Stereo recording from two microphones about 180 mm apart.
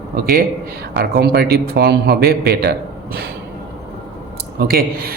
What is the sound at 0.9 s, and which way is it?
Speech, 65° right (ahead or behind).